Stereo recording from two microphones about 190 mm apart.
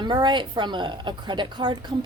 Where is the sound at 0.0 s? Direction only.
25° right (ahead or behind).